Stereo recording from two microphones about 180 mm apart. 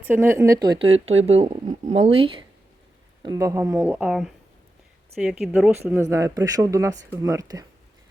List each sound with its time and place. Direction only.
0.0 s speech: 10° right (ahead or behind); by 2.4 s 30° right (ahead or behind)
3.2 s speech: 20° right (ahead or behind)